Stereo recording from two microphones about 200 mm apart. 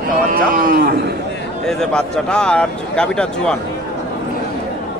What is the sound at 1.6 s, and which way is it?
Speech, 5° left (ahead or behind).